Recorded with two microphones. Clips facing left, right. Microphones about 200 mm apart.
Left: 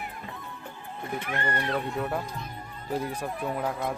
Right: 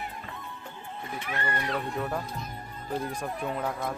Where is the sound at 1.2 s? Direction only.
55° left (ahead or behind).